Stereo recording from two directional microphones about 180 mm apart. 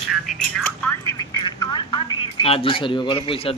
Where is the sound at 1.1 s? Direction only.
25° left (ahead or behind).